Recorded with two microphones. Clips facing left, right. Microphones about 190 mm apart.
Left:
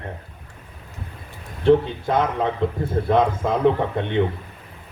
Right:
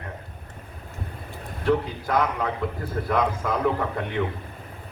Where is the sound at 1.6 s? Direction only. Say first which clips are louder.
Left 7 dB; 25° left (ahead or behind).